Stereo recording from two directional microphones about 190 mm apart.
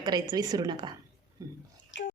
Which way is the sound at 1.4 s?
15° right (ahead or behind).